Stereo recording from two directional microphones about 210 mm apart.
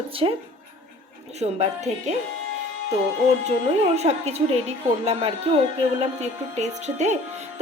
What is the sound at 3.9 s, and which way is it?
A woman's voice, 30° right (ahead or behind).